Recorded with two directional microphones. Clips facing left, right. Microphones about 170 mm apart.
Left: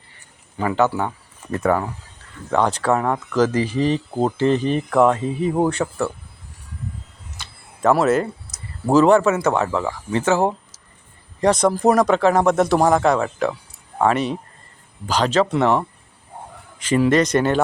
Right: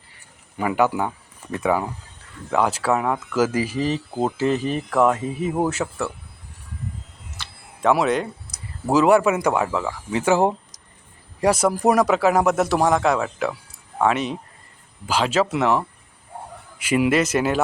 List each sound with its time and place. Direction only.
0.5 s speech: 10° right (ahead or behind)
7.8 s speech: centre (ahead or behind)
8.9 s speech: 10° right (ahead or behind)
10.3 s speech: 15° right (ahead or behind)